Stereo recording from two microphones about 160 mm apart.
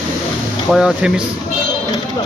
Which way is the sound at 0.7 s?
5° right (ahead or behind).